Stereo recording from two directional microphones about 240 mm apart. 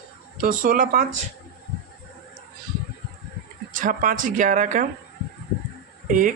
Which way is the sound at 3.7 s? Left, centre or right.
Right.